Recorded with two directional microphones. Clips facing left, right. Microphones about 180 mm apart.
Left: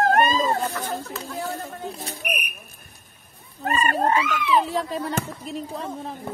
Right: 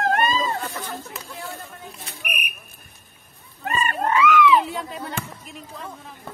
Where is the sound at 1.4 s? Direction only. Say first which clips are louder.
Left 8 dB; 40° left (ahead or behind).